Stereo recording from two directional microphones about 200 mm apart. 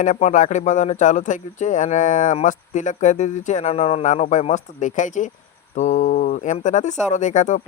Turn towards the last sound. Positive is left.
turn(degrees=35)  # may be behind; listen again after turning